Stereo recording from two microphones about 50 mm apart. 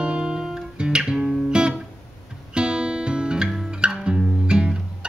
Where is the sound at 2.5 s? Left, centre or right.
Centre.